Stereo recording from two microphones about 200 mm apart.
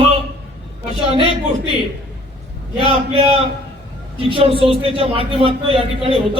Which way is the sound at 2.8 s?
25° right (ahead or behind).